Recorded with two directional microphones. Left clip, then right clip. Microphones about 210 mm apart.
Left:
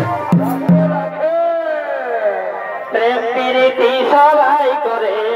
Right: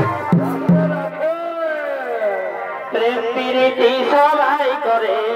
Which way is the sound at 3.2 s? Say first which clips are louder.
Left 3 dB; 15° right (ahead or behind).